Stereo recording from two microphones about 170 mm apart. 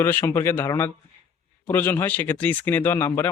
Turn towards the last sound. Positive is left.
turn(degrees=15)  # may be behind; listen again after turning